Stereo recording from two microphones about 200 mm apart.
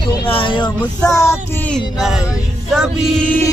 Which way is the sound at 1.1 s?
15° left (ahead or behind).